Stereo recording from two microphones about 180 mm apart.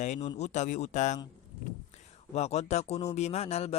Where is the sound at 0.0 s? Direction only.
40° left (ahead or behind).